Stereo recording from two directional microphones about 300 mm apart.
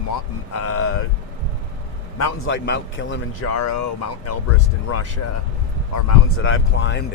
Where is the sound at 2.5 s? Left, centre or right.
Left.